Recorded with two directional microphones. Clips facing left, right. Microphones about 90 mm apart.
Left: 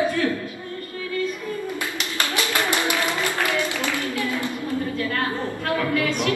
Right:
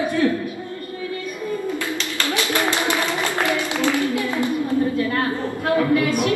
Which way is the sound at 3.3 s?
20° right (ahead or behind).